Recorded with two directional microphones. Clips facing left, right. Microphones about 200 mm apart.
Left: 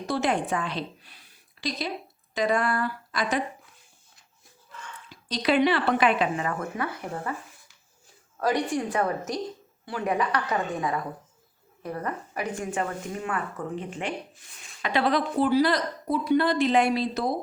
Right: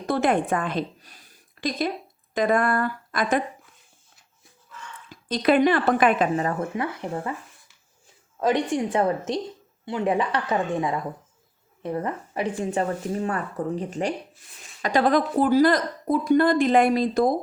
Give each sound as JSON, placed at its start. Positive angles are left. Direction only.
{"t": 0.0, "sound": "a woman's voice", "side_deg": -55}
{"t": 5.0, "sound": "speech", "side_deg": -50}
{"t": 8.4, "sound": "a woman's voice", "side_deg": -20}